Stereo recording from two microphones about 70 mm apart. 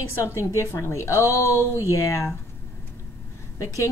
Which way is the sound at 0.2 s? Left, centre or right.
Left.